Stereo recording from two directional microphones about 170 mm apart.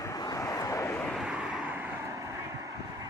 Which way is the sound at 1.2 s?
5° right (ahead or behind).